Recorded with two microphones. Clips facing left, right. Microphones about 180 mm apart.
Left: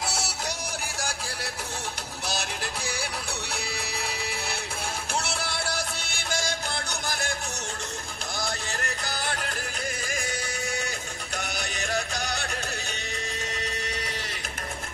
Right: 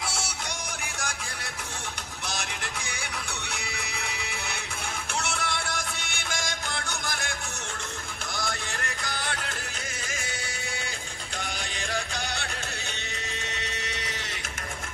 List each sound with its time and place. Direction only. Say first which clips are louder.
3.5 s music: left 3 dB; 35° left (ahead or behind)
9.0 s music: left 1 dB; 35° left (ahead or behind)
11.9 s music: left 2 dB; 40° left (ahead or behind)